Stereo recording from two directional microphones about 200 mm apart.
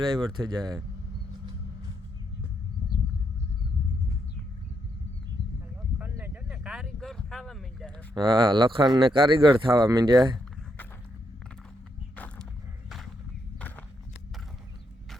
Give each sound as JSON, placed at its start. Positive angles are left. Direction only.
{"t": 0.0, "sound": "speech", "side_deg": -20}
{"t": 6.0, "sound": "vehicle", "side_deg": -10}
{"t": 8.1, "sound": "speech", "side_deg": -25}
{"t": 12.1, "sound": "walk", "side_deg": 5}
{"t": 13.6, "sound": "walk", "side_deg": 10}